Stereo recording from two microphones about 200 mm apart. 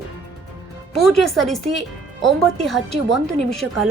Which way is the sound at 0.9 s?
Centre (ahead or behind).